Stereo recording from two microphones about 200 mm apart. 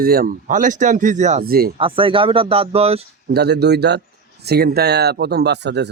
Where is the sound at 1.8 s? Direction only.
25° right (ahead or behind).